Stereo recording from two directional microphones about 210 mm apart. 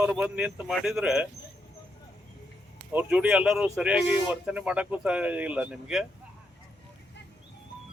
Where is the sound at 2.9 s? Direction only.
5° right (ahead or behind).